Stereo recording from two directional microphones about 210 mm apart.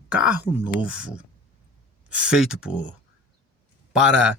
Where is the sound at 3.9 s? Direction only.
5° right (ahead or behind).